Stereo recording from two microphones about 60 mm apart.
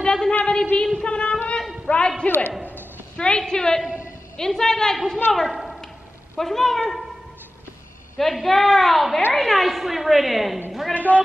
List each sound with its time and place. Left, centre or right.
0.0 s a woman's voice: centre
2.2 s a man's voice: left
3.2 s a woman's voice: centre
8.2 s a woman's voice: centre
10.9 s a woman's voice: left